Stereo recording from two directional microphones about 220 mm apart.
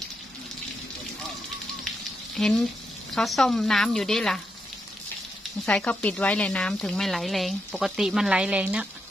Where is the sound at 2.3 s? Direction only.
Centre (ahead or behind).